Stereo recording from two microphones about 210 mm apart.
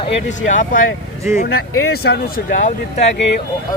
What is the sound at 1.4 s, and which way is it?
Speech, 45° left (ahead or behind).